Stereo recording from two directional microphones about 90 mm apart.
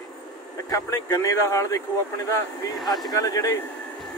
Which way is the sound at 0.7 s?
35° left (ahead or behind).